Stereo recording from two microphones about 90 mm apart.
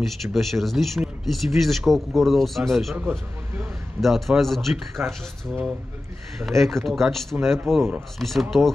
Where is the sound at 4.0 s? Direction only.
Centre (ahead or behind).